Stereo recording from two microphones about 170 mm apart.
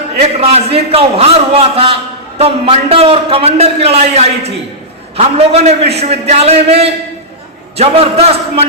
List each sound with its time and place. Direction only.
0.2 s a man's voice: 40° right (ahead or behind)